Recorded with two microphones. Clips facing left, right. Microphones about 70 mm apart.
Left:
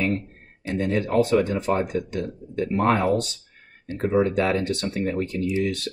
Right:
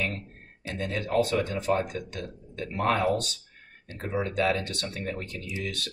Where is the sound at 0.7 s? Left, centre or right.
Left.